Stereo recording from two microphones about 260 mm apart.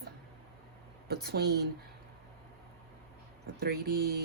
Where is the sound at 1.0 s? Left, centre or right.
Right.